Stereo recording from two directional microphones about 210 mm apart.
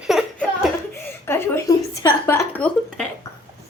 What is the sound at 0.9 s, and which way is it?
Chuckle, 10° left (ahead or behind).